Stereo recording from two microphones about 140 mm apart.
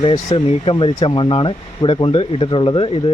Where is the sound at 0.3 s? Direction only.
40° left (ahead or behind).